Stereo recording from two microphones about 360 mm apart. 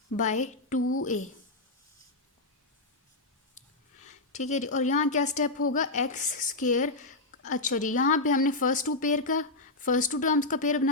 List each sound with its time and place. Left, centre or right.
0.2 s a woman's voice: centre
4.0 s a woman's voice: centre